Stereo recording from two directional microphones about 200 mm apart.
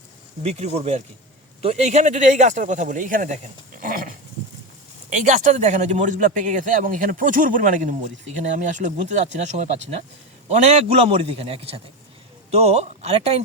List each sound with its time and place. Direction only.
0.4 s a man's voice: 30° right (ahead or behind)
3.8 s dog: 45° right (ahead or behind)
5.1 s a man's voice: 40° right (ahead or behind)